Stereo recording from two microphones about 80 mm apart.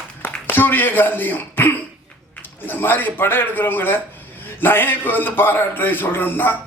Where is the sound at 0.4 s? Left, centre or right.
Left.